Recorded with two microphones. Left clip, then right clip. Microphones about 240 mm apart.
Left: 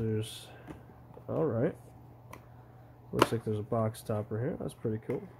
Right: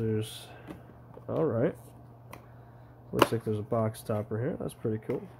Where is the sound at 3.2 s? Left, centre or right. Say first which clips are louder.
Right 2 dB; centre.